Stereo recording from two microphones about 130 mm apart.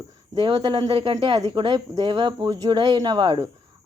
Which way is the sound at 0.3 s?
40° right (ahead or behind).